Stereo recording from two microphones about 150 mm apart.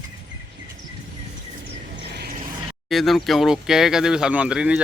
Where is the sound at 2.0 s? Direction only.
90° right.